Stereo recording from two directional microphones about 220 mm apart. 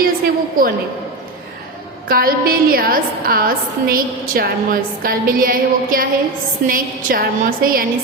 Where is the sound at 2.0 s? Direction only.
40° right (ahead or behind).